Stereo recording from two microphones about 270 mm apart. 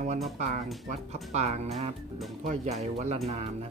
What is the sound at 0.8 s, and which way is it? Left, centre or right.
Speech, right.